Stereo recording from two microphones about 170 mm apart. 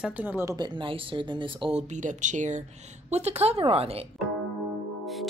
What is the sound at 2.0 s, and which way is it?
Speech, 45° right (ahead or behind).